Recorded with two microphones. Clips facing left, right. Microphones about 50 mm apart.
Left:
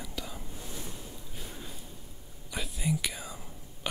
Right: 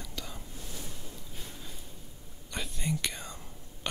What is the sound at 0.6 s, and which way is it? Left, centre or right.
Ocean, centre.